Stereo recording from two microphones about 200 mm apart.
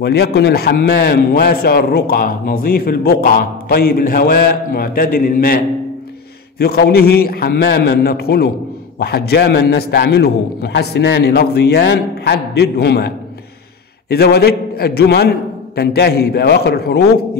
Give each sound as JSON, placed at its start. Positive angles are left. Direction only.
{"t": 0.0, "sound": "a man's voice", "side_deg": 55}
{"t": 6.6, "sound": "a man's voice", "side_deg": 50}